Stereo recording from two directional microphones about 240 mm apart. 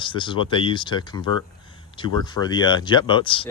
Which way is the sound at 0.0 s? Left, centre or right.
Left.